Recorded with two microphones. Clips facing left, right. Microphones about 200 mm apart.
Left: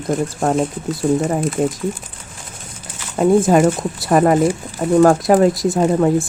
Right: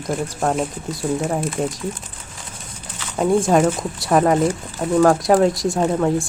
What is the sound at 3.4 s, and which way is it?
Speech, 5° left (ahead or behind).